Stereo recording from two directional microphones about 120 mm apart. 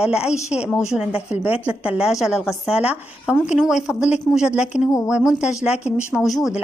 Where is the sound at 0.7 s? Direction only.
25° left (ahead or behind).